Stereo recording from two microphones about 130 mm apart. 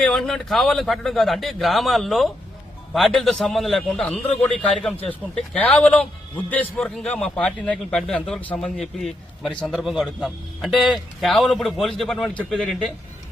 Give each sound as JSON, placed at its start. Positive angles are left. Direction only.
{"t": 0.0, "sound": "a man's voice", "side_deg": 5}